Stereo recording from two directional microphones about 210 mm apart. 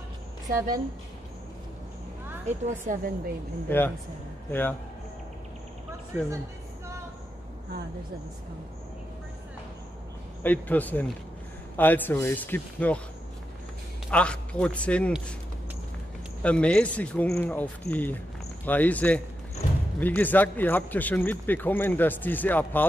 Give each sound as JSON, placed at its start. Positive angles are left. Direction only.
{"t": 0.5, "sound": "a woman's voice", "side_deg": -15}
{"t": 2.4, "sound": "a woman's voice", "side_deg": -40}
{"t": 3.6, "sound": "speech", "side_deg": 10}
{"t": 10.4, "sound": "speech", "side_deg": 10}
{"t": 14.1, "sound": "a man's voice", "side_deg": 5}
{"t": 16.4, "sound": "speech", "side_deg": 5}